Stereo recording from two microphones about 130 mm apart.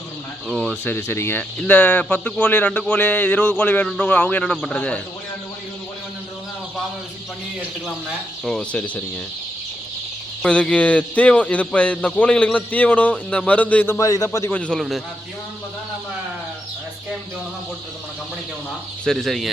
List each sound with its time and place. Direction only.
0.4 s a man's voice: 5° left (ahead or behind)
0.9 s a man's voice: 20° left (ahead or behind)
8.4 s a man's voice: 5° left (ahead or behind)
10.4 s a man's voice: 10° left (ahead or behind)
14.0 s a man's voice: 25° left (ahead or behind)
14.5 s a man's voice: 10° left (ahead or behind)
19.0 s a man's voice: centre (ahead or behind)